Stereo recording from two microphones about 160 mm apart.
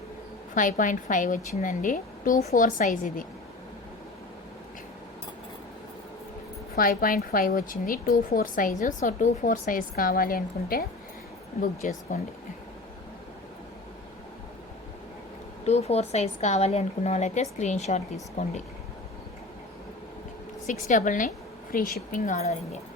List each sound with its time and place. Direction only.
0.5 s a woman's voice: 55° left (ahead or behind)
6.7 s a woman's voice: 60° left (ahead or behind)
11.6 s a woman's voice: 50° left (ahead or behind)
15.6 s a woman's voice: 40° left (ahead or behind)
20.7 s a woman's voice: 50° left (ahead or behind)